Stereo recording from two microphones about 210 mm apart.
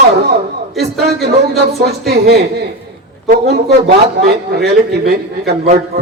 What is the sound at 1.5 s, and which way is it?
A man's voice, 50° right (ahead or behind).